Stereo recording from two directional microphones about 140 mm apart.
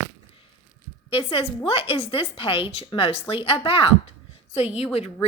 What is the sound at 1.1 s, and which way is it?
A woman's voice, 40° left (ahead or behind).